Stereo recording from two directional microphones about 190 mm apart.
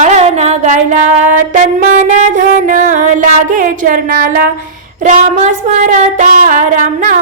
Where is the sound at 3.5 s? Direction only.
45° right (ahead or behind).